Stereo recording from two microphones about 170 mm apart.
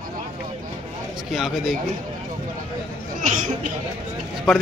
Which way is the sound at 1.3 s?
Centre (ahead or behind).